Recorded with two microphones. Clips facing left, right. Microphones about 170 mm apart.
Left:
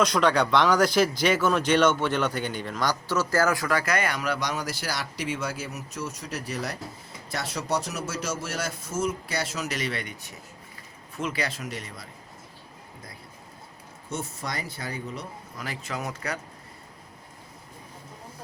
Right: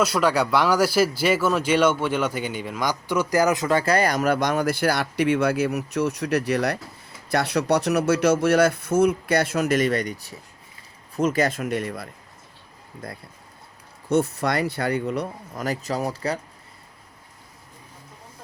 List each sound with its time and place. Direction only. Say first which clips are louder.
0.0 s speech: right 1 dB; 5° right (ahead or behind); by 15.6 s 60° right (ahead or behind)
15.6 s speech: right 8 dB; 40° right (ahead or behind)